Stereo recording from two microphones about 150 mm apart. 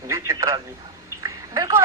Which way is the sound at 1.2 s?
20° right (ahead or behind).